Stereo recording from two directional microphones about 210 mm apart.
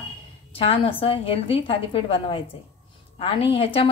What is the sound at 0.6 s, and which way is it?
A woman's voice, 25° left (ahead or behind).